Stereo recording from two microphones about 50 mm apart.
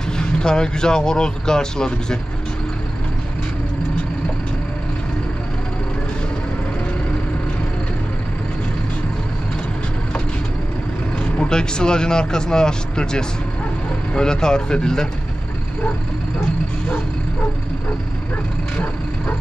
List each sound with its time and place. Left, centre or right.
0.2 s speech: centre
11.3 s speech: centre